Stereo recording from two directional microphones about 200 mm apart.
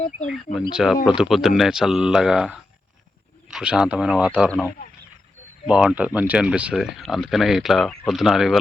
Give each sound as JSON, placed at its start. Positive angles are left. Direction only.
{"t": 0.7, "sound": "speech", "side_deg": 0}
{"t": 4.4, "sound": "speech", "side_deg": 5}
{"t": 5.6, "sound": "speech", "side_deg": -5}